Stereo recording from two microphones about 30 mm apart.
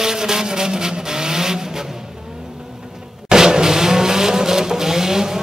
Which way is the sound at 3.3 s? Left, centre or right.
Right.